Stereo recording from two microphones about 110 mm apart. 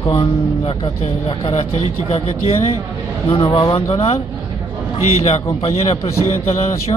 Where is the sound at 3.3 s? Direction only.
55° left (ahead or behind); by 6.0 s 70° left (ahead or behind).